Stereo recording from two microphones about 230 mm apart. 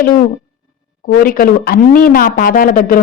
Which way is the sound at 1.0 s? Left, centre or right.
Left.